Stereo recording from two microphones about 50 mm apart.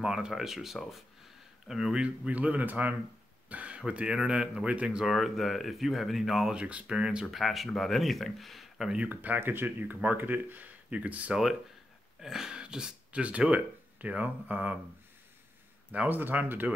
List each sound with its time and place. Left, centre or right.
0.0 s speech: centre
2.0 s speech: right
4.9 s speech: centre
6.5 s speech: right
7.2 s speech: centre
9.1 s speech: right
12.2 s a sound: centre
13.1 s speech: right
15.9 s speech: right
16.2 s speech: right